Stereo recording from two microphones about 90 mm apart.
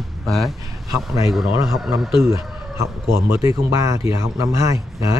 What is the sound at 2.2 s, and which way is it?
Speech, 30° right (ahead or behind).